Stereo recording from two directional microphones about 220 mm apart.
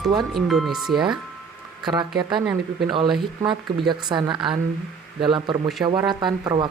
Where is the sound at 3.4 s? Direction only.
20° right (ahead or behind).